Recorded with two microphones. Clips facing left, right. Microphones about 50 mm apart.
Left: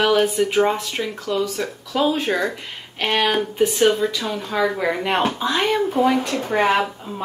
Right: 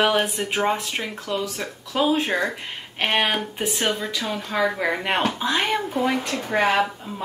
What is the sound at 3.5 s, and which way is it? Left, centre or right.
Speech, right.